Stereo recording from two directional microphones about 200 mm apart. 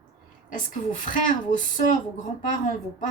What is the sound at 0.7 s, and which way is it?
A woman's voice, 40° left (ahead or behind).